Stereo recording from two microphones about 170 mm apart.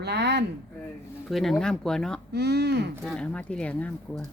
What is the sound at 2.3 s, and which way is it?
Speech, 75° right (ahead or behind).